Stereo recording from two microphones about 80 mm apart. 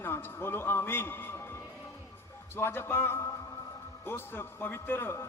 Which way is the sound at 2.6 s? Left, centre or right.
Left.